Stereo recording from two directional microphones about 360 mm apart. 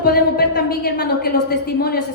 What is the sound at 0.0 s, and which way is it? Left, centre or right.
A woman's voice, left.